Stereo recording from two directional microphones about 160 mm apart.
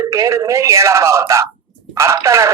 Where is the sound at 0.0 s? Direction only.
20° right (ahead or behind).